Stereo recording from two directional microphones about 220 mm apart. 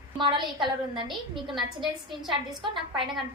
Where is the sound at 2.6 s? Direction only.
20° right (ahead or behind).